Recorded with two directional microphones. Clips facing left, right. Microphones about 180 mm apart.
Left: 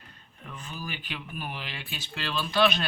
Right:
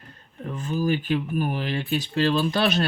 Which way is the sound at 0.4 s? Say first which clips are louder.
Right 14 dB; 45° right (ahead or behind).